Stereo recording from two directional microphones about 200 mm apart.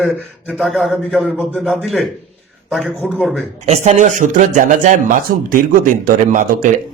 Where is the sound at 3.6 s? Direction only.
35° right (ahead or behind).